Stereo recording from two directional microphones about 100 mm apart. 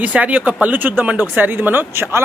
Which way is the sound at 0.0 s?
15° right (ahead or behind).